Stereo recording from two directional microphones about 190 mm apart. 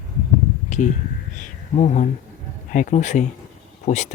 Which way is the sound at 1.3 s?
40° left (ahead or behind).